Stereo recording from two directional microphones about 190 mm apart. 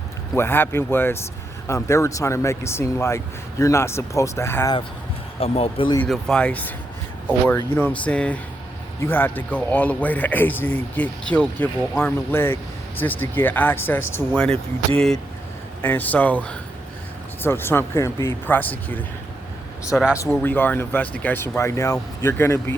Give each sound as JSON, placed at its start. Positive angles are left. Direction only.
{"t": 0.3, "sound": "speech", "side_deg": 10}
{"t": 5.4, "sound": "speech", "side_deg": 30}
{"t": 6.0, "sound": "speech", "side_deg": 5}